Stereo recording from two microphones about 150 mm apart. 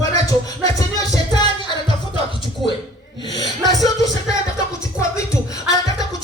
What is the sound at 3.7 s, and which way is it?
Music, 25° left (ahead or behind).